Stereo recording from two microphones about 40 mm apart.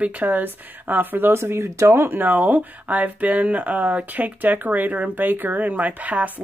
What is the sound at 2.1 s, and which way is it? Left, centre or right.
Speech, right.